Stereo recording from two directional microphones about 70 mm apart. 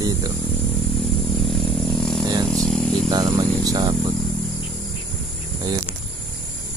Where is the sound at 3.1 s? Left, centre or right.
Right.